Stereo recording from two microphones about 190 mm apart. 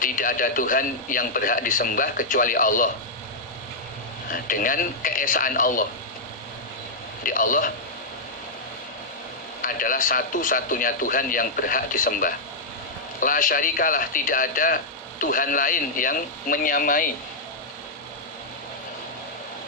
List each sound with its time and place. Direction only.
0.0 s a man's voice: 45° left (ahead or behind)
4.3 s a man's voice: 45° left (ahead or behind)
7.3 s a man's voice: 45° left (ahead or behind)
9.6 s a man's voice: 45° left (ahead or behind)